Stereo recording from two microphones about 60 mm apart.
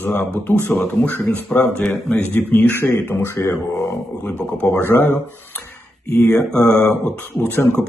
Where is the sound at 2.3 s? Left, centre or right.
Left.